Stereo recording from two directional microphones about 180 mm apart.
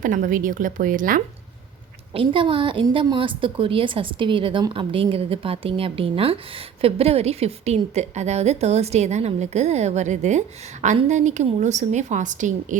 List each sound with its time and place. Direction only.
0.0 s a woman's voice: 50° right (ahead or behind)
2.1 s a woman's voice: 30° right (ahead or behind)